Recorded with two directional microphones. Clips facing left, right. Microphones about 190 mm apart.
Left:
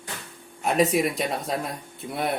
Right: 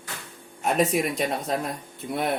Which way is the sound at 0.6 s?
Centre (ahead or behind).